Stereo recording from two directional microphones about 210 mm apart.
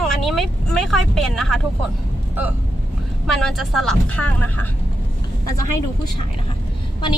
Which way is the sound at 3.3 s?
Centre (ahead or behind).